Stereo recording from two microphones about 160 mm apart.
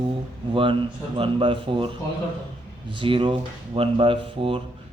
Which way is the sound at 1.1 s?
35° right (ahead or behind).